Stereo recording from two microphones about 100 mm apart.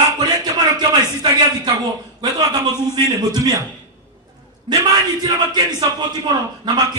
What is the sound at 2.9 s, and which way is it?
Speech, 45° right (ahead or behind).